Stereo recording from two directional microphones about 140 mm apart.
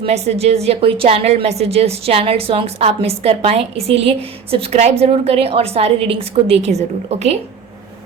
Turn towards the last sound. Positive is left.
turn(degrees=-50)  # may be behind; listen again after turning